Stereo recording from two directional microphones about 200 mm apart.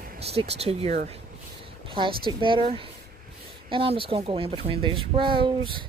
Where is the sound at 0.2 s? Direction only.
30° right (ahead or behind).